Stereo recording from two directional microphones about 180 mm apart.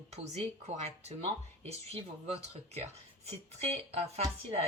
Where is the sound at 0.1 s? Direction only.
35° right (ahead or behind).